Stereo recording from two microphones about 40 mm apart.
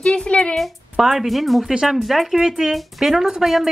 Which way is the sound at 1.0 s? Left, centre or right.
Centre.